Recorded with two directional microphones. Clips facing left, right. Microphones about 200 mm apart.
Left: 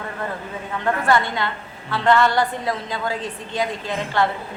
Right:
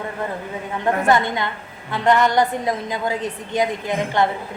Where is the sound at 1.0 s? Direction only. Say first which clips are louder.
Right 1 dB; 20° right (ahead or behind).